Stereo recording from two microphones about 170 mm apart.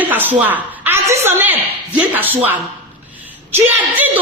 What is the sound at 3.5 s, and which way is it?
Speech, 10° right (ahead or behind).